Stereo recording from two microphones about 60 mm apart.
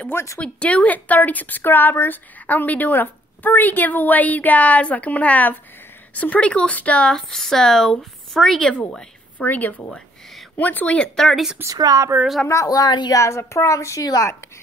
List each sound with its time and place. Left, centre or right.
0.1 s speech: left
0.4 s speech: left
7.1 s a woman's voice: centre
9.4 s speech: left
11.2 s speech: centre
11.6 s speech: right
12.6 s speech: left